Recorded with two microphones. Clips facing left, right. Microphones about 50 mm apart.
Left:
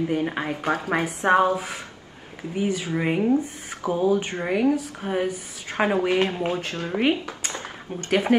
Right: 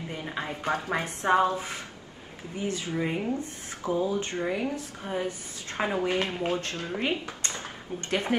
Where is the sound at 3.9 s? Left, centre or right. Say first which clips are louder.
Left 6 dB; left.